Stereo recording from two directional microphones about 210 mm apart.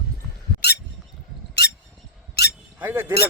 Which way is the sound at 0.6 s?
50° left (ahead or behind).